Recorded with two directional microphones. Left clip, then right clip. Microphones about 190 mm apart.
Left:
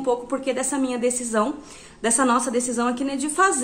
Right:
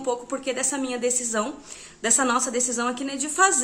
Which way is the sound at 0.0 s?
5° right (ahead or behind).